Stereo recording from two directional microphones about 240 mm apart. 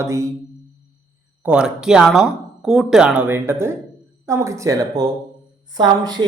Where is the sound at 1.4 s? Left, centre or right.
Centre.